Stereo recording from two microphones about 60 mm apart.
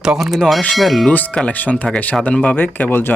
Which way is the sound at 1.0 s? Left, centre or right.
Left.